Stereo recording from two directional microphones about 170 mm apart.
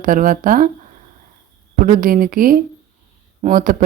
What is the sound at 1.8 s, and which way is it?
A woman's voice, 55° right (ahead or behind).